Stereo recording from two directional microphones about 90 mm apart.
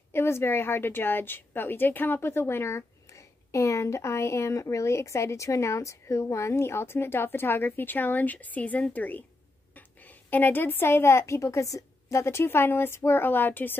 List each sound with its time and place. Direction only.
0.1 s a woman's voice: 25° left (ahead or behind)